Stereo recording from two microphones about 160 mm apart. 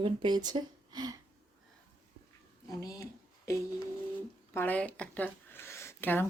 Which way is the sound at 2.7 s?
20° left (ahead or behind).